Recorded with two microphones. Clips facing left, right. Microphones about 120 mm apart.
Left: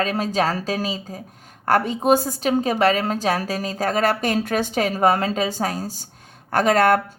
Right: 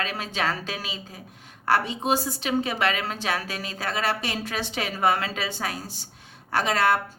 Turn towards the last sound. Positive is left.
turn(degrees=50)  # may be behind; listen again after turning